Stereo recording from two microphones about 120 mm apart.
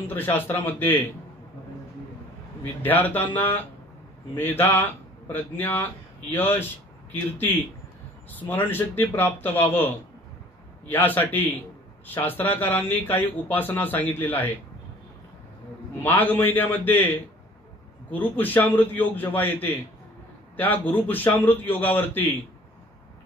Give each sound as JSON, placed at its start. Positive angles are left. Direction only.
{"t": 0.1, "sound": "speech", "side_deg": 15}
{"t": 2.8, "sound": "speech", "side_deg": 15}
{"t": 10.9, "sound": "speech", "side_deg": 15}
{"t": 16.0, "sound": "speech", "side_deg": 15}
{"t": 18.1, "sound": "speech", "side_deg": 15}